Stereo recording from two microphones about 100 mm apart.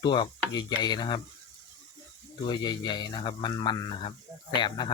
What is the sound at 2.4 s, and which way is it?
Speech, 45° left (ahead or behind).